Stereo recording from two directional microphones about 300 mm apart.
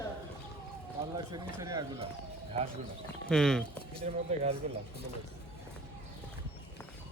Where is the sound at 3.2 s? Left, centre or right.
Centre.